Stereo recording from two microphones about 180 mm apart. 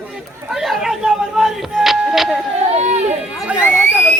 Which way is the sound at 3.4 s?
5° right (ahead or behind).